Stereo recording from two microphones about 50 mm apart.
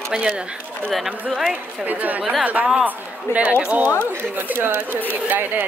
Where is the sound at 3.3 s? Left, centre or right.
Left.